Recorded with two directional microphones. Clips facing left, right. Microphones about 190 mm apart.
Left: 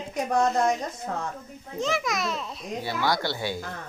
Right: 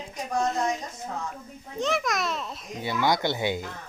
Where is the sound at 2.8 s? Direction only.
20° right (ahead or behind).